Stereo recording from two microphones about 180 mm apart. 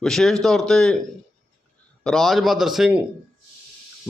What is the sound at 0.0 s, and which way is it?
Speech, centre (ahead or behind).